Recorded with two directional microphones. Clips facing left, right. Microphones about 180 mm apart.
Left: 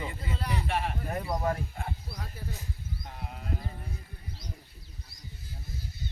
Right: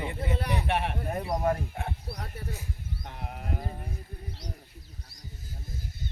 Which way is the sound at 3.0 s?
65° right (ahead or behind).